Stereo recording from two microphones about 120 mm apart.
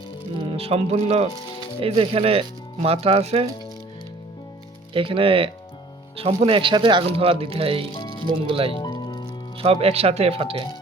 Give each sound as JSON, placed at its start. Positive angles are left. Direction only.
{"t": 0.5, "sound": "speech", "side_deg": -55}
{"t": 4.9, "sound": "speech", "side_deg": -45}
{"t": 8.7, "sound": "music", "side_deg": 35}
{"t": 9.6, "sound": "speech", "side_deg": -55}